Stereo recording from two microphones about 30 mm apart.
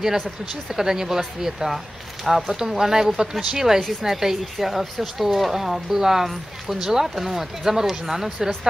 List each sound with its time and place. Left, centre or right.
0.7 s speech: centre